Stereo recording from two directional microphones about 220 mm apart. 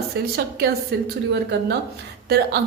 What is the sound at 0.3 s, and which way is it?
A woman's voice, 45° right (ahead or behind).